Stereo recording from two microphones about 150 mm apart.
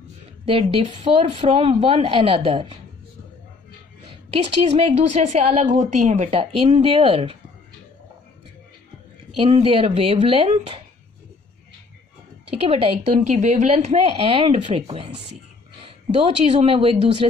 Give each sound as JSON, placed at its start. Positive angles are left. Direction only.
{"t": 0.5, "sound": "a woman's voice", "side_deg": -40}
{"t": 4.1, "sound": "a woman's voice", "side_deg": -40}
{"t": 9.4, "sound": "a woman's voice", "side_deg": -35}
{"t": 12.5, "sound": "a woman's voice", "side_deg": -40}
{"t": 13.1, "sound": "a woman's voice", "side_deg": -50}